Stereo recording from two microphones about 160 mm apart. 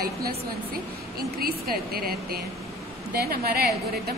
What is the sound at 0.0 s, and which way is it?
Speech, 70° right (ahead or behind).